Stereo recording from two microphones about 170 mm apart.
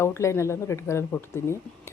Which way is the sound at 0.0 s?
15° left (ahead or behind).